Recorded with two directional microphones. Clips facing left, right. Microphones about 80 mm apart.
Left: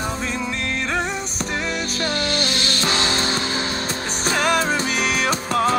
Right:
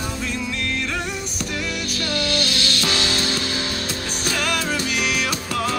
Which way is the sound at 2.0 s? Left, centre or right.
Left.